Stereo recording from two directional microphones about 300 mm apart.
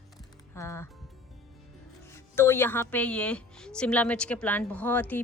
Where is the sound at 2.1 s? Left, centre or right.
Centre.